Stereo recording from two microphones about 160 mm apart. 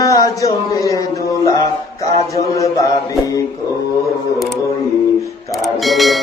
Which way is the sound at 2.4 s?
20° left (ahead or behind).